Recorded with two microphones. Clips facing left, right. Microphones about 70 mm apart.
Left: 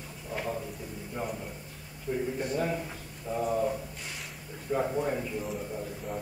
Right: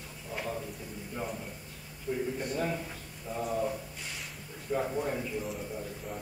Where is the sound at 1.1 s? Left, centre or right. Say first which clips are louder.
Left 2 dB; centre.